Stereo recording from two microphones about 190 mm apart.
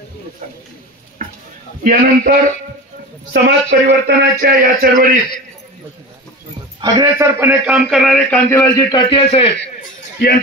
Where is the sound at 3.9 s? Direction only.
55° right (ahead or behind).